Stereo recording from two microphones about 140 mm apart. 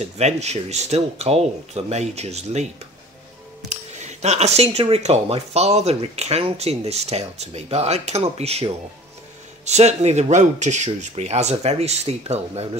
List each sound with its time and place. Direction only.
0.0 s speech: 50° right (ahead or behind)